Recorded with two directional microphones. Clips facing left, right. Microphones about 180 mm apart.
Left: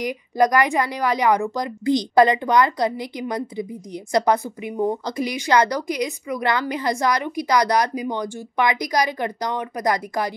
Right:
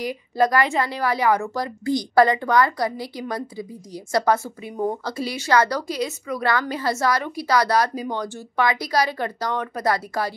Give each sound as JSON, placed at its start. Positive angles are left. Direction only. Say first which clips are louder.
{"t": 0.0, "sound": "a woman's voice", "louder": "left 2 dB", "side_deg": 15}